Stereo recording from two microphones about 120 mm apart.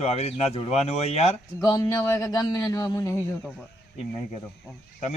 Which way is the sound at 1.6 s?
25° left (ahead or behind).